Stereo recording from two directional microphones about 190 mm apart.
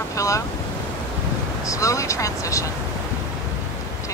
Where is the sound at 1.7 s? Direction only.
15° left (ahead or behind).